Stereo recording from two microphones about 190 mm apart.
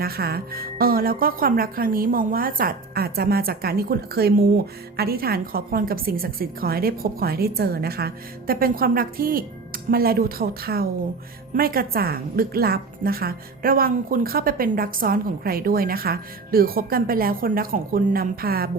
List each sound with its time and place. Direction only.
0.0 s speech: 55° right (ahead or behind)